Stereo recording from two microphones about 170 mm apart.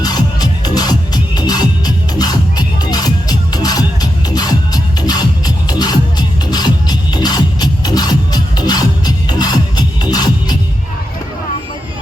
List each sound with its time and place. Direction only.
0.0 s music: 25° left (ahead or behind)